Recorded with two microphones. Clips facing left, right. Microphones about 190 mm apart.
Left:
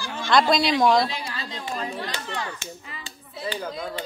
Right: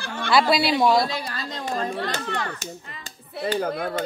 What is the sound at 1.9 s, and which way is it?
Speech, 60° right (ahead or behind).